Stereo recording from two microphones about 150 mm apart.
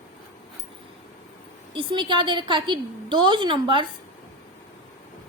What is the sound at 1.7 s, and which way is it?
A woman's voice, 30° right (ahead or behind).